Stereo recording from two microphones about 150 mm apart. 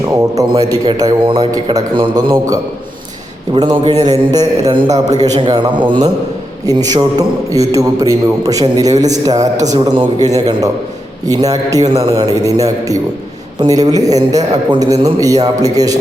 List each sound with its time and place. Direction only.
0.3 s a man's voice: 25° right (ahead or behind)